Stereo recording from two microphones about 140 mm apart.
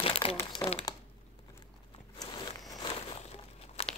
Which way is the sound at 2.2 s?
25° left (ahead or behind).